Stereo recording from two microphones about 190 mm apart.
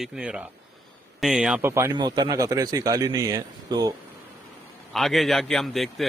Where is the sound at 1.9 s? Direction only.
20° right (ahead or behind).